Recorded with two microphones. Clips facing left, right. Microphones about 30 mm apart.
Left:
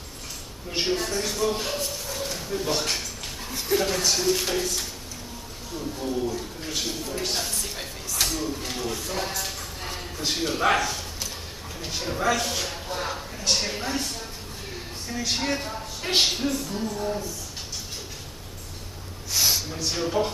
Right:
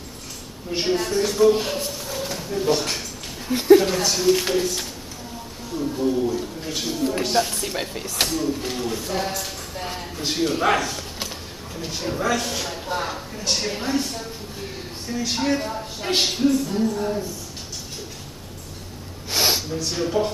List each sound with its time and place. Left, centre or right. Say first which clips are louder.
0.7 s speech: right 3 dB; centre
5.8 s a sound: right 6 dB; centre
7.3 s speech: right 8 dB; centre
8.3 s speech: right 5 dB; centre
19.3 s gasp: right 3 dB; right
19.7 s speech: right 3 dB; centre